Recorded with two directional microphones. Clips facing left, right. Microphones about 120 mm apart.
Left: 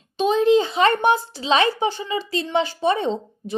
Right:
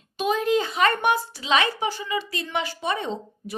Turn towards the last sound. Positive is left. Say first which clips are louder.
# left 6 dB
turn(degrees=30)  # may be behind; listen again after turning